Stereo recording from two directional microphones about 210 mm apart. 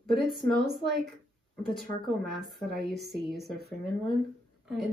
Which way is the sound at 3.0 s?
Centre (ahead or behind).